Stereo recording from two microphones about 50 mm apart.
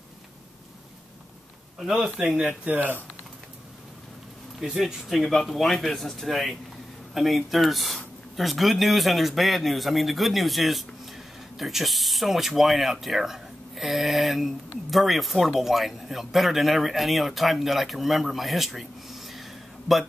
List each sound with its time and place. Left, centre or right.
2.0 s speech: centre
2.7 s speech: right
4.6 s speech: centre